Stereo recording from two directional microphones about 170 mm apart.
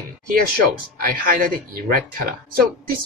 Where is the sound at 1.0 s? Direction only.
60° right (ahead or behind).